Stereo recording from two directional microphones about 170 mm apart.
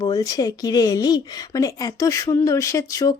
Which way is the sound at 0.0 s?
20° left (ahead or behind).